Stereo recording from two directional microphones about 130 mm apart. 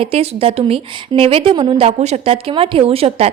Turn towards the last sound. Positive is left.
turn(degrees=-50)  # may be behind; listen again after turning